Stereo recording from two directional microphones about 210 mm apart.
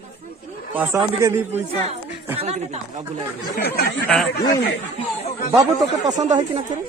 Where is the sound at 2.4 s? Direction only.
30° right (ahead or behind).